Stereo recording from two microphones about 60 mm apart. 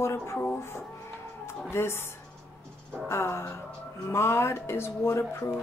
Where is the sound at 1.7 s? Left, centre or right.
Left.